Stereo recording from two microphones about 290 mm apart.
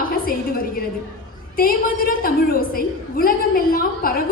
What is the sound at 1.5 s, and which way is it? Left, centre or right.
A woman's voice, left.